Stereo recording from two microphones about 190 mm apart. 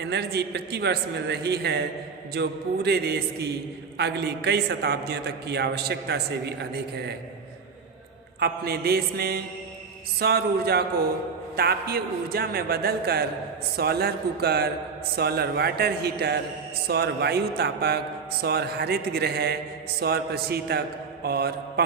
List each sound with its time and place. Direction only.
0.0 s a man's voice: 60° right (ahead or behind)
8.4 s a man's voice: 55° right (ahead or behind)